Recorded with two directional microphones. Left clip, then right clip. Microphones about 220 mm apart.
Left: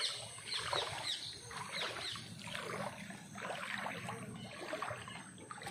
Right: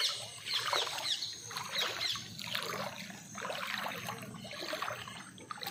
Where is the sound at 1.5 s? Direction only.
55° right (ahead or behind).